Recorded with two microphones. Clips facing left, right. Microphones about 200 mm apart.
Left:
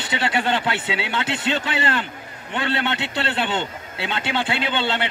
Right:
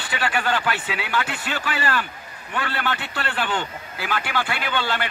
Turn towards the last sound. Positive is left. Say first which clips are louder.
# left 2 dB
turn(degrees=25)  # may be behind; listen again after turning